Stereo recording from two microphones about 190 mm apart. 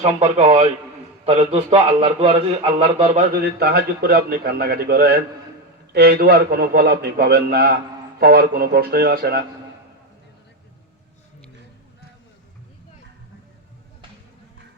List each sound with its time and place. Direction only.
0.0 s a man's voice: 40° right (ahead or behind); by 9.4 s 55° right (ahead or behind)